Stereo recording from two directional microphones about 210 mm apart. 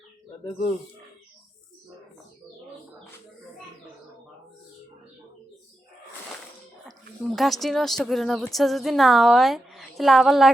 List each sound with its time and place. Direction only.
6.8 s speech: centre (ahead or behind)